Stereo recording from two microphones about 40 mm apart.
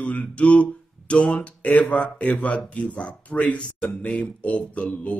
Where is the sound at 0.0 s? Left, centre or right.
Left.